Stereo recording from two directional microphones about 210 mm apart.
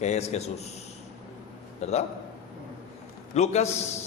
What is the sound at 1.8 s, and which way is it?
Speech, 30° left (ahead or behind).